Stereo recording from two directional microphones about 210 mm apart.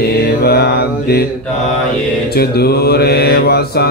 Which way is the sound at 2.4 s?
50° left (ahead or behind).